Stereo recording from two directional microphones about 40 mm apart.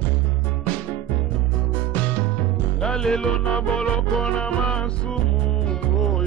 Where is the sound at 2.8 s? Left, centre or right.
Centre.